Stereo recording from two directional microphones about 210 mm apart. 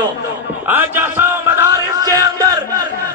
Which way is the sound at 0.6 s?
10° right (ahead or behind).